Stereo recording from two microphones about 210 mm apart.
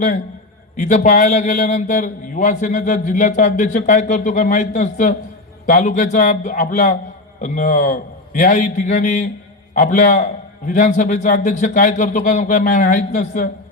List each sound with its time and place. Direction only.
0.8 s a man's voice: 35° left (ahead or behind)